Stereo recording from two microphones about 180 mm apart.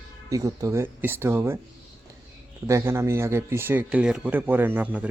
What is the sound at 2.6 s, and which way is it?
Speech, 15° right (ahead or behind).